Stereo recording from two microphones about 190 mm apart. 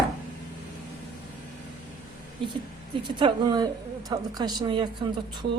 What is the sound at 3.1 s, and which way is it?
A woman's voice, 20° right (ahead or behind).